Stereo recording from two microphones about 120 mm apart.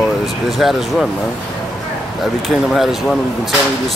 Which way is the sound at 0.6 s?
Centre (ahead or behind).